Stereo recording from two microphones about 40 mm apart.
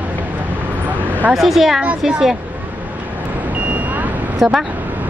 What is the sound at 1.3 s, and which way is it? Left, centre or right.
A woman's voice, centre.